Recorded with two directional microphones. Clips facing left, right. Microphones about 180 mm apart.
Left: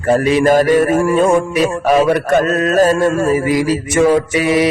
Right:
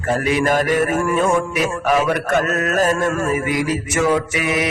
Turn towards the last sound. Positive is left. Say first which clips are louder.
# left 6 dB
turn(degrees=30)  # may be behind; listen again after turning